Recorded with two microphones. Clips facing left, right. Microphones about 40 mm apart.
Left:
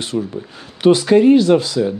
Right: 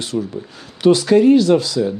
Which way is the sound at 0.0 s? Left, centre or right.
Left.